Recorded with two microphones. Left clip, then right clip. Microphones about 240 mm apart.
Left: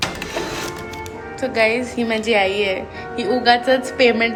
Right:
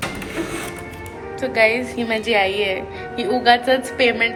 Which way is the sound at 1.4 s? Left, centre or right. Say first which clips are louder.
Right 1 dB; centre.